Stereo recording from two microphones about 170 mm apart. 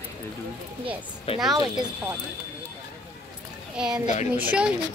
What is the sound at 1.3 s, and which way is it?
Speech, 35° left (ahead or behind).